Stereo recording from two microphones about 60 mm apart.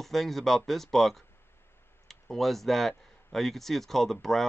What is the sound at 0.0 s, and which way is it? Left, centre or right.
Speech, centre.